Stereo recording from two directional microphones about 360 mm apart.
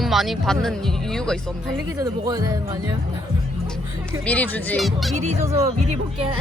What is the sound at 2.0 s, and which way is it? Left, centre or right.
Speech, centre.